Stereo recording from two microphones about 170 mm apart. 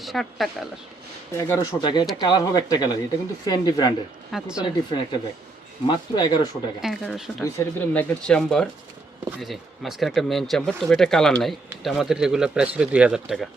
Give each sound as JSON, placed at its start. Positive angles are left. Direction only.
{"t": 0.0, "sound": "speech", "side_deg": 0}
{"t": 1.4, "sound": "a man's voice", "side_deg": 20}
{"t": 4.3, "sound": "speech", "side_deg": -5}
{"t": 4.6, "sound": "a man's voice", "side_deg": 25}
{"t": 6.8, "sound": "speech", "side_deg": 0}